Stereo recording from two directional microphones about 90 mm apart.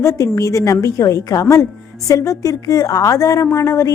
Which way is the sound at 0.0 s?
35° left (ahead or behind).